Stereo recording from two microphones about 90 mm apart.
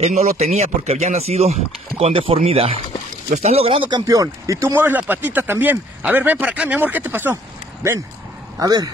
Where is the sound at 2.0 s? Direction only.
85° right.